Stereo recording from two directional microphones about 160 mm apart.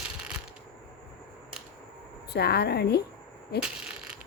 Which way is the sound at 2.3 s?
90° left.